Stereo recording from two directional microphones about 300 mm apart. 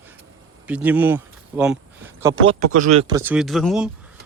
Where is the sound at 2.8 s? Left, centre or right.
Centre.